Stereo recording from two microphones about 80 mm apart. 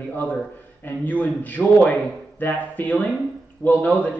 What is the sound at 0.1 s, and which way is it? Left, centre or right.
Speech, left.